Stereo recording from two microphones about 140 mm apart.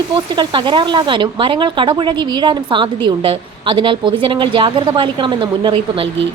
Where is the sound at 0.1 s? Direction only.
35° right (ahead or behind).